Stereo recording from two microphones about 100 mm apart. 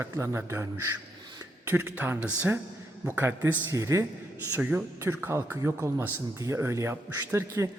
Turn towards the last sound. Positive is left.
turn(degrees=-30)  # may be behind; listen again after turning